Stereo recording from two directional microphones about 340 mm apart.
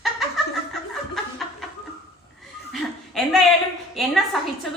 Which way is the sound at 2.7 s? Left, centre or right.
Centre.